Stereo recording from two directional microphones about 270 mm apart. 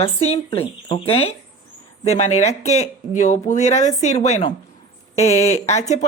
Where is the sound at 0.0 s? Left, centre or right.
Left.